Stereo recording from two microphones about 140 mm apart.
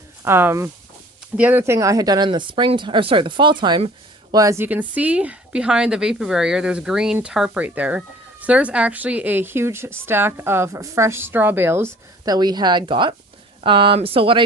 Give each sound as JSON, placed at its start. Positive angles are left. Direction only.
{"t": 0.3, "sound": "speech", "side_deg": -15}
{"t": 4.3, "sound": "speech", "side_deg": -25}